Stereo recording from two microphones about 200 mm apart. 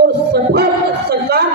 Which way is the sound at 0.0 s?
50° right (ahead or behind).